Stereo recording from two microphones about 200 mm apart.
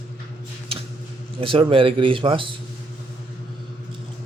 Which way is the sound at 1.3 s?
25° right (ahead or behind).